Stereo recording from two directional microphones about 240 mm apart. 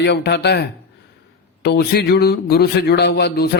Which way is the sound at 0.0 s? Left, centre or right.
Left.